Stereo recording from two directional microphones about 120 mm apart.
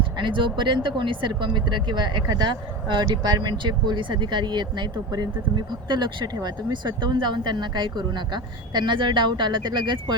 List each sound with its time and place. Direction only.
0.2 s speech: 45° right (ahead or behind)